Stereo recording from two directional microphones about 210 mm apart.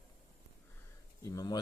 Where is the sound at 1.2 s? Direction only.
15° left (ahead or behind).